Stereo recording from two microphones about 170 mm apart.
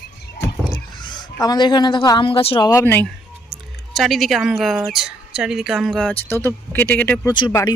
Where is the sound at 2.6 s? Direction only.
15° left (ahead or behind).